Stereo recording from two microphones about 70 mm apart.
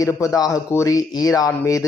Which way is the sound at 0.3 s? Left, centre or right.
Left.